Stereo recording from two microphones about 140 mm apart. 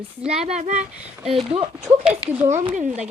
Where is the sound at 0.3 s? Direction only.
50° right (ahead or behind).